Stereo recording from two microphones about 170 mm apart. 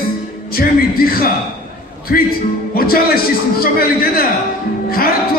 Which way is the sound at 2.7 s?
60° left (ahead or behind).